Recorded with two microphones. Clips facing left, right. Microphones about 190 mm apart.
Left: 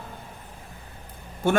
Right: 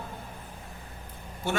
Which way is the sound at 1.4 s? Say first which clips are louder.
Left 8 dB; 50° left (ahead or behind).